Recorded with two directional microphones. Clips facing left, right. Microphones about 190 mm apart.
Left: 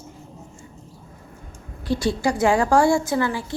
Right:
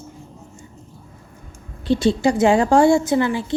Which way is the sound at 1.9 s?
25° right (ahead or behind).